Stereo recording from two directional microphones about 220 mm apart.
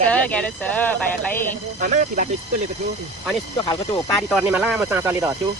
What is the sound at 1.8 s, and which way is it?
Speech, 35° right (ahead or behind).